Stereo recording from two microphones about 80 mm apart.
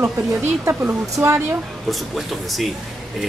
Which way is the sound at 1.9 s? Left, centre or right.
Centre.